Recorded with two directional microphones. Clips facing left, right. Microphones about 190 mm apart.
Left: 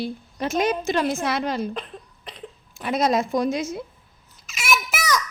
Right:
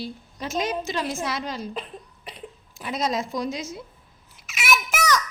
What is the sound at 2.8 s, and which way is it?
Speech, 60° left (ahead or behind).